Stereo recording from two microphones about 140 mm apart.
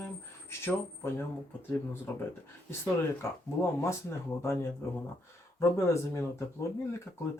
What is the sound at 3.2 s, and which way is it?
Speech, 20° left (ahead or behind).